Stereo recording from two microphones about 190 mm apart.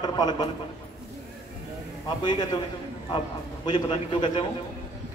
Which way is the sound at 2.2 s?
25° left (ahead or behind).